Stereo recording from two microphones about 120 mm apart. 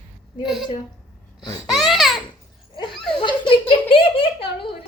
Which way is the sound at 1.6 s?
Centre (ahead or behind).